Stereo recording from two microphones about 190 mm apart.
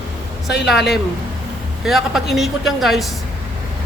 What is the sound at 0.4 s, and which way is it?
Speech, 65° left (ahead or behind).